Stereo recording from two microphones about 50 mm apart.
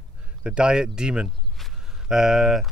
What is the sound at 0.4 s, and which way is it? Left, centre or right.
Speech, centre.